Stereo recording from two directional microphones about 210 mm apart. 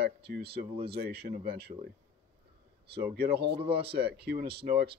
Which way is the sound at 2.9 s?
50° right (ahead or behind).